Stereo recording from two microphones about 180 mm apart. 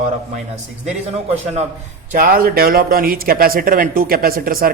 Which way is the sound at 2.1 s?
55° right (ahead or behind).